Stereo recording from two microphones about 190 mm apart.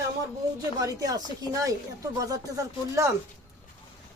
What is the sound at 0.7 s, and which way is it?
Speech, 20° right (ahead or behind).